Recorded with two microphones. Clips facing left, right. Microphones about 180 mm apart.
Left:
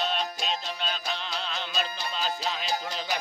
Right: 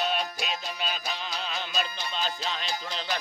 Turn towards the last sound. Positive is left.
turn(degrees=10)  # may be behind; listen again after turning